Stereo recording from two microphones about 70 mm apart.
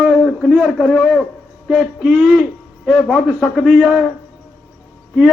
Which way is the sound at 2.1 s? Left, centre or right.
Right.